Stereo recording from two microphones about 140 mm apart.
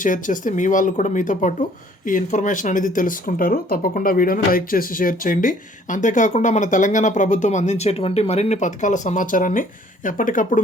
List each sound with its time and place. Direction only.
0.0 s speech: 65° left (ahead or behind)